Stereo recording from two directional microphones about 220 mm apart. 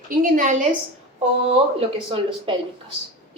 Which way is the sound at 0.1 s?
40° right (ahead or behind).